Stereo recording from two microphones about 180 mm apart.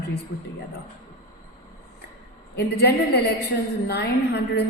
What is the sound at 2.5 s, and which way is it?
A woman's voice, 65° left (ahead or behind).